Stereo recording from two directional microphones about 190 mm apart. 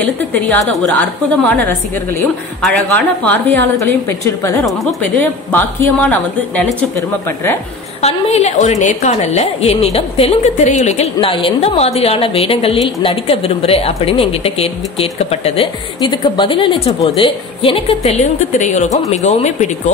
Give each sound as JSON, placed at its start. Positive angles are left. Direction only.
{"t": 0.3, "sound": "a woman's voice", "side_deg": 5}
{"t": 8.0, "sound": "speech", "side_deg": 35}